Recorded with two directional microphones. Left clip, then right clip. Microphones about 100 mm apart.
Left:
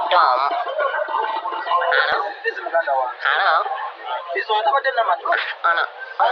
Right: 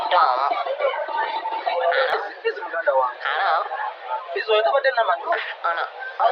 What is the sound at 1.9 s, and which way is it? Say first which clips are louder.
Speech: left 4 dB; 55° left (ahead or behind).